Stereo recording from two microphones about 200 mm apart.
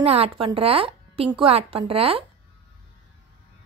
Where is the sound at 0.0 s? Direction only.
30° right (ahead or behind).